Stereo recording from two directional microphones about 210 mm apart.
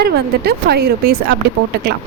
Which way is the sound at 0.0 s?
50° right (ahead or behind).